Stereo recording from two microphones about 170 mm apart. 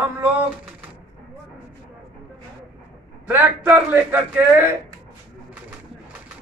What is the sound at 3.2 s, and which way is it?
Speech, 10° right (ahead or behind).